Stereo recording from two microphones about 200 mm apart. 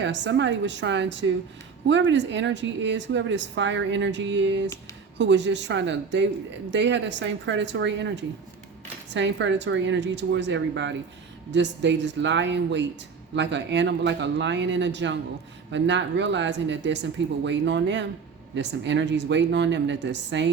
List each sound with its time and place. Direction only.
0.0 s speech: 60° right (ahead or behind)